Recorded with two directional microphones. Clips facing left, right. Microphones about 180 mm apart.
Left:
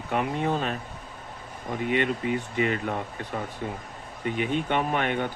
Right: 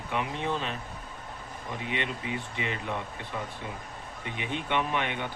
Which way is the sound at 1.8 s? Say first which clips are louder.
Left 9 dB; 50° left (ahead or behind).